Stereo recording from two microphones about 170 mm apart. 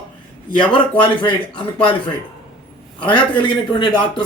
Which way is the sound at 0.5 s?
30° left (ahead or behind).